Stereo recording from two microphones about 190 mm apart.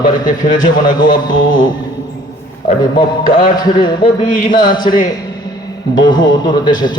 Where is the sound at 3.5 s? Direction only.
20° left (ahead or behind).